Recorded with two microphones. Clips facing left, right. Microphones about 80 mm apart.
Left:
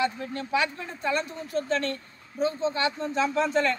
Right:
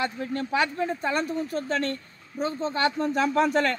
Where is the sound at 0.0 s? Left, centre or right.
Right.